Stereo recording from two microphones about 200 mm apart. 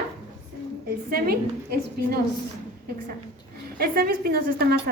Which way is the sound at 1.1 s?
50° right (ahead or behind).